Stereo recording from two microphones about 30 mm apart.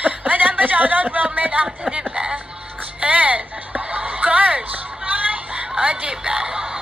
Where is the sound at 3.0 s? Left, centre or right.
Right.